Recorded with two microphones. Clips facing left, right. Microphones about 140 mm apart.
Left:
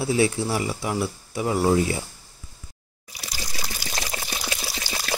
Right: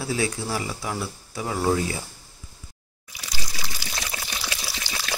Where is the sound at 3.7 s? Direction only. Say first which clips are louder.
Left 3 dB; 40° left (ahead or behind).